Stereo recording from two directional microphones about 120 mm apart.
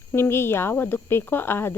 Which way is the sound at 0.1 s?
20° left (ahead or behind).